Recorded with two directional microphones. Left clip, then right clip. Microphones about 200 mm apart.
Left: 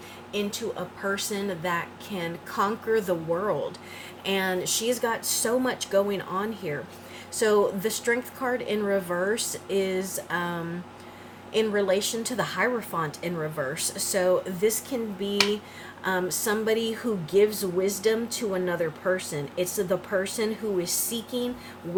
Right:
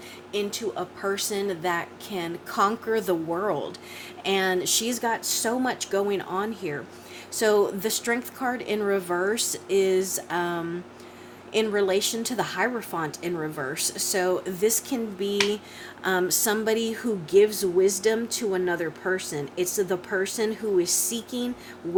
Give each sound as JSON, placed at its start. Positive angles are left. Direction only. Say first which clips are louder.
{"t": 1.1, "sound": "a woman's voice", "louder": "right 3 dB", "side_deg": -45}